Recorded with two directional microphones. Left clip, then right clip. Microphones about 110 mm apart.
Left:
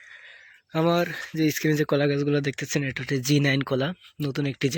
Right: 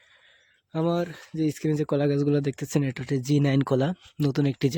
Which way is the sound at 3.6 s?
45° right (ahead or behind).